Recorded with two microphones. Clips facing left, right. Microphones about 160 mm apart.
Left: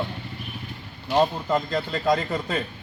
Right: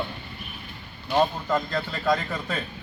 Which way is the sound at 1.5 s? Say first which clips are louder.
Left 2 dB; 20° left (ahead or behind).